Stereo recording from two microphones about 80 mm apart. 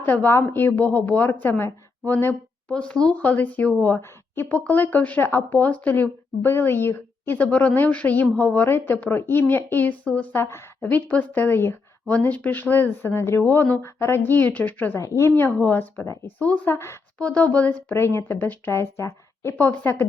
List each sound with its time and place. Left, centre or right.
0.0 s a woman's voice: left
2.1 s a woman's voice: centre
10.3 s a woman's voice: left
12.0 s a woman's voice: centre
14.9 s speech: left
15.4 s a woman's voice: left
16.7 s speech: left
17.2 s speech: centre
17.9 s a woman's voice: left
18.7 s a woman's voice: left
19.5 s a woman's voice: left